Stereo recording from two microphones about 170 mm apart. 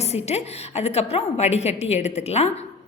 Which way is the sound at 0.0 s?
40° left (ahead or behind).